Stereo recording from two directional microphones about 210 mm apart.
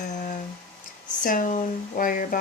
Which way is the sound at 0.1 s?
35° left (ahead or behind).